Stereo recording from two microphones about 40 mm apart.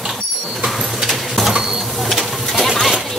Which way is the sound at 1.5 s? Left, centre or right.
Centre.